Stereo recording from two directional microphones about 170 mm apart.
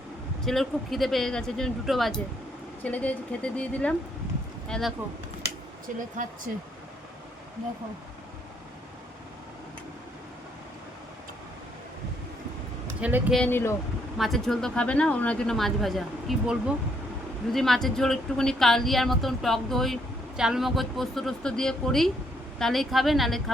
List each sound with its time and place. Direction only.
0.4 s a woman's voice: centre (ahead or behind)
6.0 s speech: 50° right (ahead or behind)
13.0 s speech: 10° right (ahead or behind)
13.3 s a woman's voice: 10° left (ahead or behind)
14.2 s speech: centre (ahead or behind)